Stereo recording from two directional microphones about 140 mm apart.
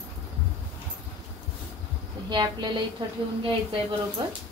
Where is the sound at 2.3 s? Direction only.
35° right (ahead or behind).